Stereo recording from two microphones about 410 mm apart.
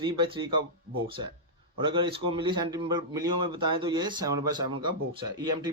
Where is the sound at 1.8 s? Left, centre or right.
Centre.